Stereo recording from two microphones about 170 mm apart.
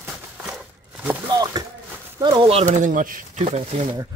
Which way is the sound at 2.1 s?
25° right (ahead or behind).